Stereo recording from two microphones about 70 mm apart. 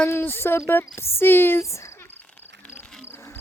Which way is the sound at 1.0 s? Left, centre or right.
Left.